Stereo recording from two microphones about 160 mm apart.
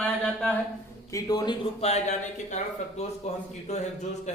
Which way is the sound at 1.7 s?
40° left (ahead or behind).